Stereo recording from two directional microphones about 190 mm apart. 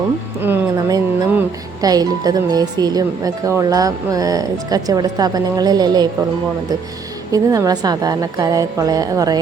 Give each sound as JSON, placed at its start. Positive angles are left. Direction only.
{"t": 0.4, "sound": "speech", "side_deg": -15}
{"t": 7.3, "sound": "speech", "side_deg": -20}